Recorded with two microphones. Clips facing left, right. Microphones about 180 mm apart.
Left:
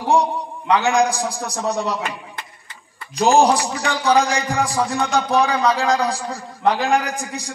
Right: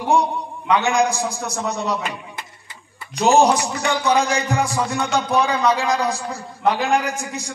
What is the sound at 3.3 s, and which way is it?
A man's voice, 35° left (ahead or behind).